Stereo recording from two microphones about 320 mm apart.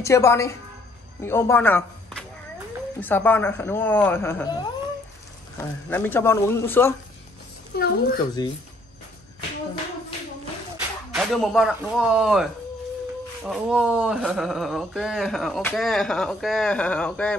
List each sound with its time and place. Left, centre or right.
0.0 s speech: centre
5.9 s speech: centre
7.7 s a woman's voice: left
8.4 s speech: centre
11.1 s speech: centre